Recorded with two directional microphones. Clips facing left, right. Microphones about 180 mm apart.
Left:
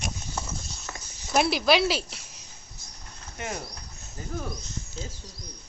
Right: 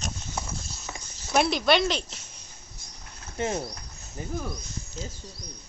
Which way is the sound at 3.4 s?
25° right (ahead or behind).